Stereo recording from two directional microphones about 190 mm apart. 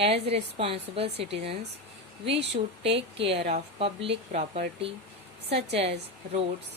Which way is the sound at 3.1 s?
30° right (ahead or behind).